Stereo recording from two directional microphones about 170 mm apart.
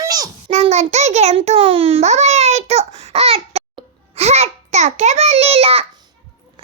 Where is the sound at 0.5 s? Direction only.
40° right (ahead or behind).